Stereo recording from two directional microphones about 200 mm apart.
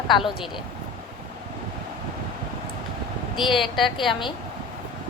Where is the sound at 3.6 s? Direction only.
Centre (ahead or behind).